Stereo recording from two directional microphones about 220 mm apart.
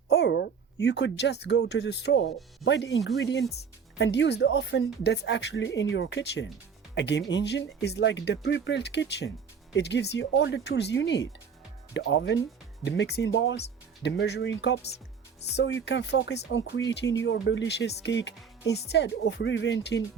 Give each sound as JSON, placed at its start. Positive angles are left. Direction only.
{"t": 0.1, "sound": "speech", "side_deg": 50}
{"t": 14.8, "sound": "speech", "side_deg": 30}
{"t": 15.4, "sound": "speech", "side_deg": 55}